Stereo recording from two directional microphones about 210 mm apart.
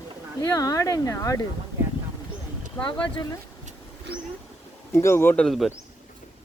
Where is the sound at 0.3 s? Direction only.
15° left (ahead or behind).